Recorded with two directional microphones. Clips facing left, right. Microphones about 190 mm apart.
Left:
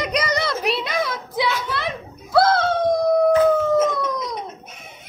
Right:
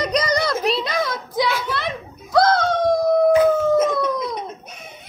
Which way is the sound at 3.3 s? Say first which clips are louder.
Right 1 dB; 10° right (ahead or behind).